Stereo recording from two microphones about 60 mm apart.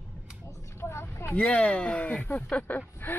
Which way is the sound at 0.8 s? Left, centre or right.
Left.